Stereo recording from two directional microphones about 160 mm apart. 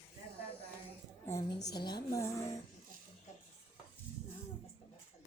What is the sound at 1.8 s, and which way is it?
Speech, 25° left (ahead or behind).